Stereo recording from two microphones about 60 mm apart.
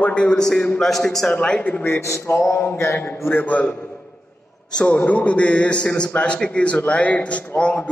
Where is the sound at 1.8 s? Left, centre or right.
Left.